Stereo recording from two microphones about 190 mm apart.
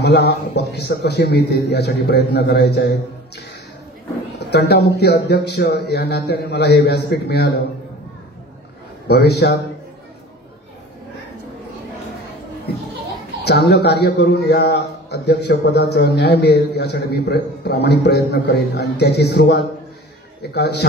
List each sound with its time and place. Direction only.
0.0 s a man's voice: 60° left (ahead or behind)
4.4 s a man's voice: 60° left (ahead or behind)
9.0 s a man's voice: 60° left (ahead or behind)
13.4 s a man's voice: 60° left (ahead or behind)